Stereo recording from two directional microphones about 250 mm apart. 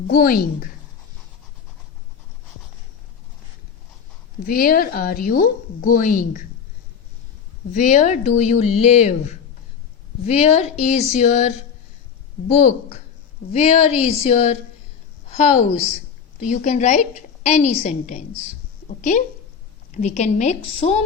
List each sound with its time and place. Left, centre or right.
0.1 s a woman's voice: left
4.4 s a woman's voice: left
7.7 s a woman's voice: left